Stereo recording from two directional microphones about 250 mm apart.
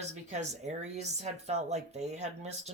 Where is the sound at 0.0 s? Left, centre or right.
Right.